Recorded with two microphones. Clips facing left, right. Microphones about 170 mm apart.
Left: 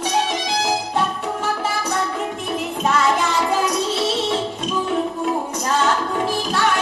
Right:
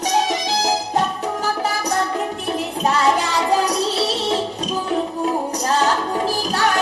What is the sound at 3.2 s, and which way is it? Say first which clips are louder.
Music: right 1 dB; 35° right (ahead or behind).